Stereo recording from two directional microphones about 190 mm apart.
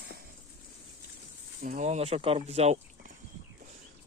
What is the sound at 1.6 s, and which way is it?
Speech, 45° right (ahead or behind).